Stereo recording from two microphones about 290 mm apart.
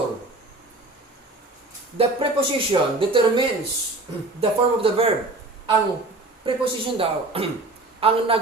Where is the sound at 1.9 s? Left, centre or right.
Centre.